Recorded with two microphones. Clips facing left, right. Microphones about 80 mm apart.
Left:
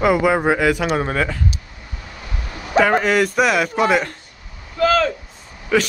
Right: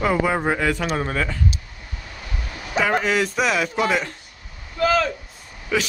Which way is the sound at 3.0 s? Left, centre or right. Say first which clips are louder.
Left 4 dB; centre.